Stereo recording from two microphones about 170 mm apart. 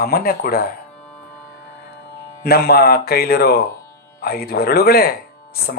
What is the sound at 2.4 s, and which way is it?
Speech, 70° left (ahead or behind).